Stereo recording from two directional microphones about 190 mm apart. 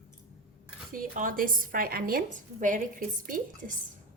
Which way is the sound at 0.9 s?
45° right (ahead or behind).